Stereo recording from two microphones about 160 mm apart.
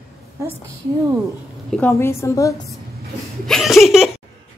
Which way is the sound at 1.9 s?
15° left (ahead or behind).